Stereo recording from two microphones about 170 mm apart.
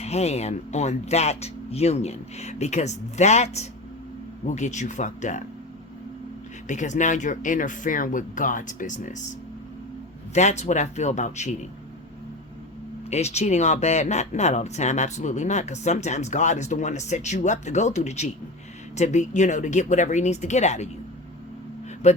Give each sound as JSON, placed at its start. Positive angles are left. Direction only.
{"t": 0.0, "sound": "speech", "side_deg": 40}
{"t": 6.7, "sound": "speech", "side_deg": 45}
{"t": 10.3, "sound": "speech", "side_deg": 40}
{"t": 13.1, "sound": "speech", "side_deg": 40}
{"t": 22.0, "sound": "speech", "side_deg": 40}